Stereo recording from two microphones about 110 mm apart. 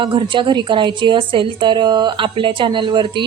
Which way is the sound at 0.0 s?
45° right (ahead or behind).